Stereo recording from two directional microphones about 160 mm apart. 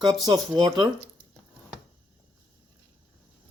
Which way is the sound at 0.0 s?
25° right (ahead or behind).